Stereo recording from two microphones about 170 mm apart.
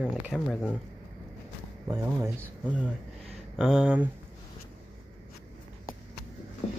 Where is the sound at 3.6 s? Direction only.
5° right (ahead or behind).